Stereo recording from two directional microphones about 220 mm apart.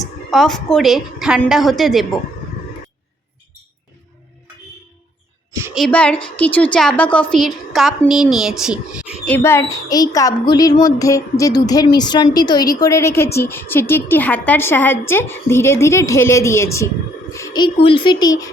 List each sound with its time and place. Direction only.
0.3 s a woman's voice: centre (ahead or behind)
5.5 s a sound: 15° right (ahead or behind)
5.7 s a woman's voice: 5° left (ahead or behind)
9.3 s a woman's voice: 10° left (ahead or behind)